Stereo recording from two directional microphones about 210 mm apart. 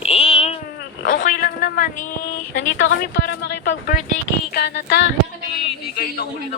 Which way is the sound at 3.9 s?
35° left (ahead or behind).